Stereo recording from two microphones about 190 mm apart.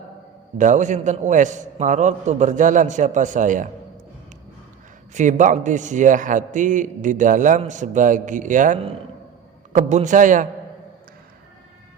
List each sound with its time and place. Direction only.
0.6 s a man's voice: 40° right (ahead or behind)
5.1 s a man's voice: 40° right (ahead or behind)